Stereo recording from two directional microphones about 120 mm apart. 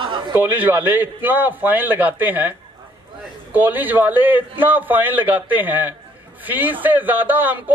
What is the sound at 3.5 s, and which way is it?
Speech, 15° right (ahead or behind).